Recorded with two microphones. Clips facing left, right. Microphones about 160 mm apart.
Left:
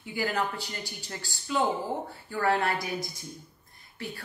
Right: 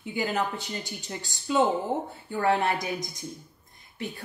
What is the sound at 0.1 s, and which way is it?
A woman's voice, 20° right (ahead or behind).